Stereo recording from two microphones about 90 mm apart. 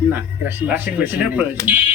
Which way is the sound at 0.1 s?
20° right (ahead or behind).